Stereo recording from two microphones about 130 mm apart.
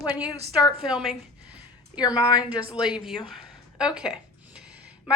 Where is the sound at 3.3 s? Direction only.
5° right (ahead or behind).